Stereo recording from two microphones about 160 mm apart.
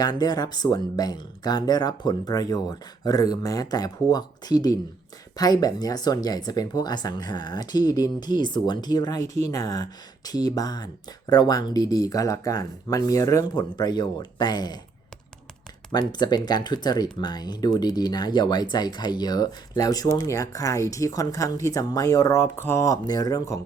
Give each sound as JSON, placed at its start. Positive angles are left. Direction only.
{"t": 0.0, "sound": "speech", "side_deg": 25}
{"t": 15.9, "sound": "speech", "side_deg": 25}